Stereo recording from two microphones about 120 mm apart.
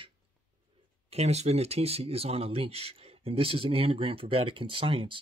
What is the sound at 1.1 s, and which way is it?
Speech, 65° right (ahead or behind).